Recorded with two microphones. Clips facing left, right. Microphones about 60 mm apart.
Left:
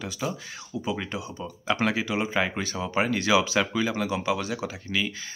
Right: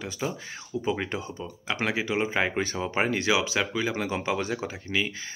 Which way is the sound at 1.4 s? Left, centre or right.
Centre.